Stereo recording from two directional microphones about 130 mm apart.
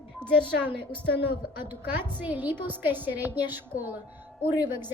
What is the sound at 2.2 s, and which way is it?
A woman's voice, 15° right (ahead or behind).